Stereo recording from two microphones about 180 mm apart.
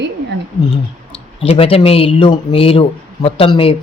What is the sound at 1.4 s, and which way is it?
Speech, 30° left (ahead or behind).